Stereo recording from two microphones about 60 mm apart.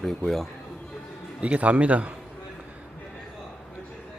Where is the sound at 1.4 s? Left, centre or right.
Right.